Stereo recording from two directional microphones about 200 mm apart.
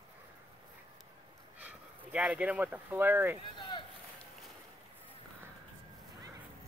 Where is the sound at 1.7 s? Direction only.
5° right (ahead or behind).